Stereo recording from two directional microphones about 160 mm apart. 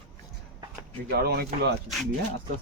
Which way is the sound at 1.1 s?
75° right (ahead or behind).